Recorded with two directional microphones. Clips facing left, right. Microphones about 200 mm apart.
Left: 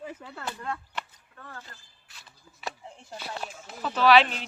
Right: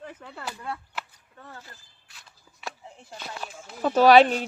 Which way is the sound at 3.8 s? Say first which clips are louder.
Right 5 dB; 45° right (ahead or behind).